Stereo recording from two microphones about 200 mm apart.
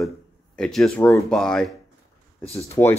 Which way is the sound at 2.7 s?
10° left (ahead or behind).